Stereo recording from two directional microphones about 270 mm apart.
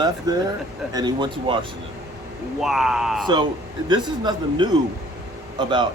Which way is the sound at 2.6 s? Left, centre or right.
Centre.